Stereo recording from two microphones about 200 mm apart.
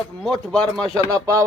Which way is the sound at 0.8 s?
15° right (ahead or behind).